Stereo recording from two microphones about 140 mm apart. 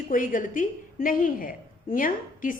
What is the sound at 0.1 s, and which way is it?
A woman's voice, 75° left (ahead or behind).